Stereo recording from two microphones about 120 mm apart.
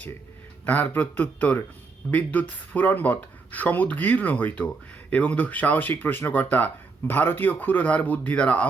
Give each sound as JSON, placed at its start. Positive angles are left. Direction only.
{"t": 0.6, "sound": "speech", "side_deg": 15}